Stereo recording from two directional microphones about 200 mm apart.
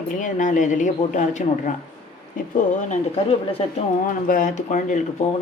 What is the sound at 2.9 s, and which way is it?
Speech, 30° left (ahead or behind).